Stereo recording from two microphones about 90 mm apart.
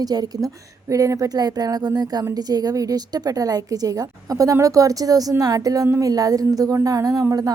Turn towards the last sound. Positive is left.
turn(degrees=-40)  # may be behind; listen again after turning